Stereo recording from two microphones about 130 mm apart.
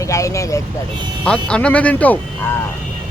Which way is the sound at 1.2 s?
10° left (ahead or behind).